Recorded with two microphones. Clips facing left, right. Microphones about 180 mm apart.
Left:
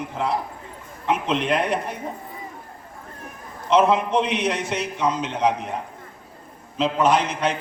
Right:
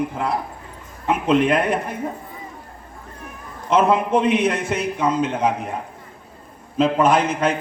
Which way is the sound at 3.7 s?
50° right (ahead or behind).